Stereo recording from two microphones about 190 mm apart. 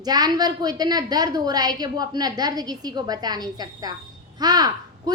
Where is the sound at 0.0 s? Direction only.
20° right (ahead or behind).